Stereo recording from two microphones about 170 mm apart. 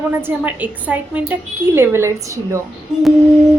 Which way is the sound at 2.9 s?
5° right (ahead or behind).